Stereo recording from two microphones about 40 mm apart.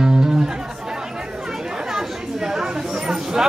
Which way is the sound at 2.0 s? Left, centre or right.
Centre.